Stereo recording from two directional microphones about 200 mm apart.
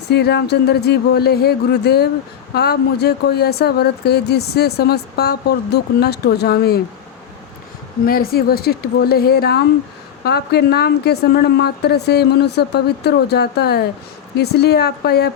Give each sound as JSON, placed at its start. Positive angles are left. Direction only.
{"t": 0.1, "sound": "a woman's voice", "side_deg": 55}
{"t": 8.0, "sound": "a woman's voice", "side_deg": 50}